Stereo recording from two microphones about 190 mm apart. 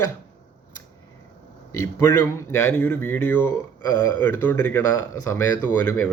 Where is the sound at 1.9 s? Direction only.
15° left (ahead or behind).